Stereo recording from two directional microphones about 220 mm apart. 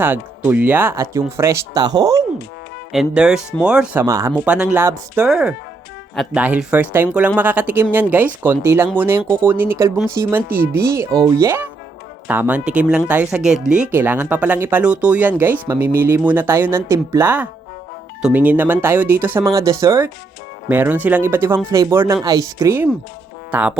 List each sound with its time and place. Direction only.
0.0 s speech: 10° right (ahead or behind)
2.9 s speech: centre (ahead or behind)
4.0 s speech: 15° right (ahead or behind)
23.5 s music: 5° right (ahead or behind)